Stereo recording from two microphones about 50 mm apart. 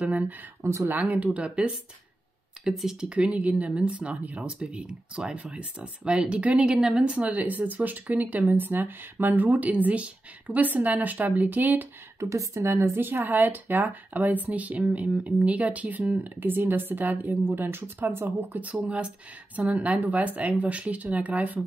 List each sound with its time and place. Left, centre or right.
0.6 s speech: right
0.8 s speech: right
2.6 s a woman's voice: centre
3.1 s speech: right
4.4 s a woman's voice: centre
6.6 s a woman's voice: centre
7.2 s speech: right
8.5 s speech: right
12.2 s a woman's voice: right
13.0 s speech: right